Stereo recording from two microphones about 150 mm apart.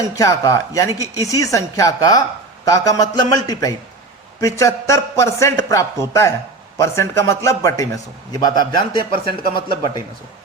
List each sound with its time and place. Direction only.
0.2 s a man's voice: 20° left (ahead or behind)